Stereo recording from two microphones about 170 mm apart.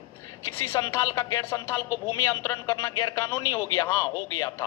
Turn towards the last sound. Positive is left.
turn(degrees=15)  # may be behind; listen again after turning